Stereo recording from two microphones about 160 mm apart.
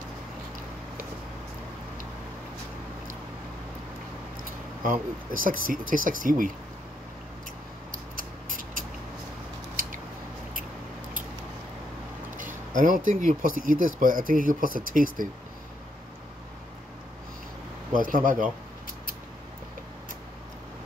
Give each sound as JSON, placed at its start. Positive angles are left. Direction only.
{"t": 4.5, "sound": "speech", "side_deg": -60}
{"t": 9.8, "sound": "scissors", "side_deg": -60}
{"t": 12.4, "sound": "speech", "side_deg": -55}
{"t": 17.9, "sound": "speech", "side_deg": -60}